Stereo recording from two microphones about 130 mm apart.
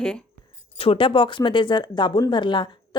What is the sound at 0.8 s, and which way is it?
Speech, 45° left (ahead or behind).